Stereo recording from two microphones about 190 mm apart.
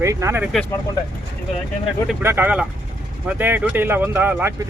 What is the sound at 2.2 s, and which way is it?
Speech, 10° right (ahead or behind).